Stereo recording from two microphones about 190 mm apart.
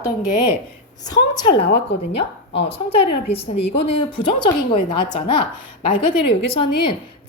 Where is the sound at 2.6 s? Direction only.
30° left (ahead or behind).